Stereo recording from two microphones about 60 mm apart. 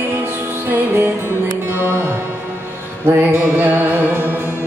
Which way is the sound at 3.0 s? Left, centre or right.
Right.